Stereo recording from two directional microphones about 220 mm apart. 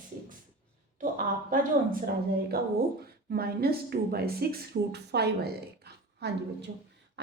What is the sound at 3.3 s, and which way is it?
A woman's voice, 45° right (ahead or behind).